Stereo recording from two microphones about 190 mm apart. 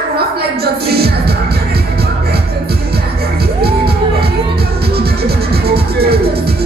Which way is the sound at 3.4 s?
55° right (ahead or behind).